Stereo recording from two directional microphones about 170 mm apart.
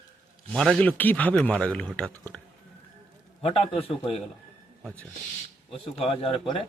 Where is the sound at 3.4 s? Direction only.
35° left (ahead or behind).